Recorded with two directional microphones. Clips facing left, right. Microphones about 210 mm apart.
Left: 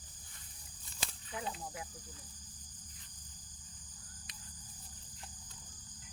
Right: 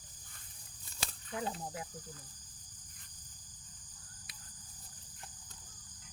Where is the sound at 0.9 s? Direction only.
40° right (ahead or behind).